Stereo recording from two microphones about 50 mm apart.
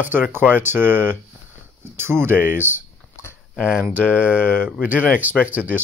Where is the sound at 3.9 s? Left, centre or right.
Left.